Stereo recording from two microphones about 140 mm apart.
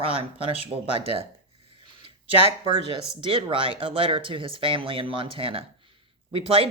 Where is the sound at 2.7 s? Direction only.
45° right (ahead or behind).